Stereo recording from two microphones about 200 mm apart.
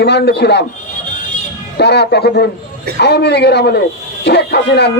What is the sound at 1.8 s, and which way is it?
A man's voice, 55° left (ahead or behind).